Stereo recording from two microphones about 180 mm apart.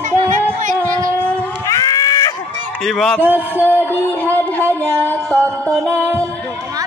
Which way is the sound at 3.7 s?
10° right (ahead or behind).